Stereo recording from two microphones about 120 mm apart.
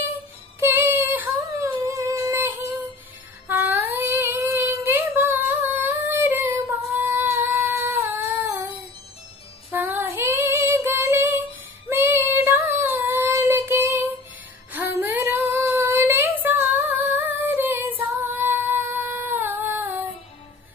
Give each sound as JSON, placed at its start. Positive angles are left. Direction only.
{"t": 0.6, "sound": "child singing", "side_deg": -15}
{"t": 1.9, "sound": "humming", "side_deg": -25}
{"t": 3.4, "sound": "child singing", "side_deg": -15}
{"t": 4.7, "sound": "humming", "side_deg": -20}
{"t": 9.7, "sound": "female singing", "side_deg": -15}
{"t": 11.9, "sound": "child singing", "side_deg": -20}
{"t": 14.7, "sound": "female singing", "side_deg": -15}